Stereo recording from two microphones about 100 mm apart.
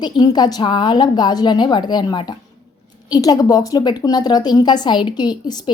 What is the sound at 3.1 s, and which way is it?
A woman's voice, 40° left (ahead or behind).